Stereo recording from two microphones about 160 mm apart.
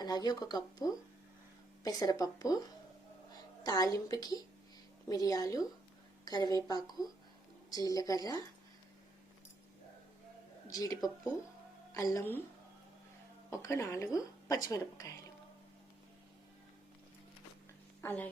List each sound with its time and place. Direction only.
0.0 s speech: 25° left (ahead or behind)
3.6 s speech: 25° left (ahead or behind)
10.7 s a woman's voice: 20° left (ahead or behind)
13.5 s speech: 20° left (ahead or behind)
18.0 s a woman's voice: 10° left (ahead or behind)